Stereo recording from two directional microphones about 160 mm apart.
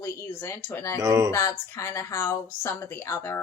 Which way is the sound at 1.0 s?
20° right (ahead or behind).